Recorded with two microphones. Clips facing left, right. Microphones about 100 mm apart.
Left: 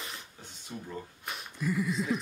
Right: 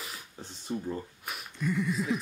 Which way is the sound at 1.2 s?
Centre (ahead or behind).